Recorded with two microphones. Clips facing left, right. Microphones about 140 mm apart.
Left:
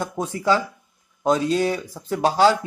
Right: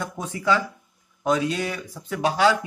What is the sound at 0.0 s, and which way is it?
Speech, 35° left (ahead or behind).